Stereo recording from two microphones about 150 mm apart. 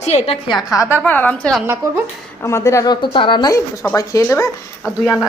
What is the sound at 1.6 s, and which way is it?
Speech, 15° right (ahead or behind).